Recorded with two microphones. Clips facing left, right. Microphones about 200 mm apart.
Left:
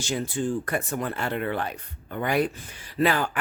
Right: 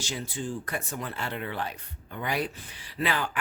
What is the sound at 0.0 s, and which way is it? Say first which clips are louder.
Speech: left 7 dB; 50° left (ahead or behind).